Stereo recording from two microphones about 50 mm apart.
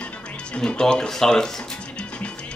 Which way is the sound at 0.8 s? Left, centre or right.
Centre.